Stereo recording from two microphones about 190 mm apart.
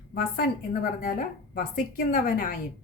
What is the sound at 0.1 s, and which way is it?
A woman's voice, 50° left (ahead or behind).